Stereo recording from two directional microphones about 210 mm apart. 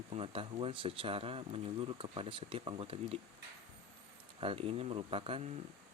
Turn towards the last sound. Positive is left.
turn(degrees=-25)  # may be behind; listen again after turning